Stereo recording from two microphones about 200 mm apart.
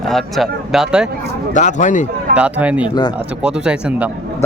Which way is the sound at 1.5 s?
40° left (ahead or behind).